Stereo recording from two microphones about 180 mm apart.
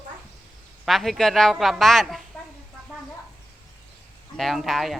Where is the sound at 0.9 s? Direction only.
Centre (ahead or behind).